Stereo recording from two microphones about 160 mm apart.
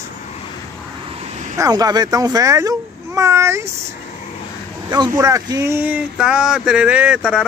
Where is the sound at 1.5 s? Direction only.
20° right (ahead or behind).